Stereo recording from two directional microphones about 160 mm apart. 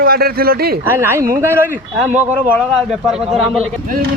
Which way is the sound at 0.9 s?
15° right (ahead or behind).